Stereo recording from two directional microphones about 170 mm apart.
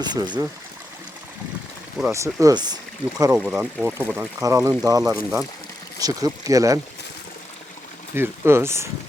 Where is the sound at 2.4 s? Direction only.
25° right (ahead or behind).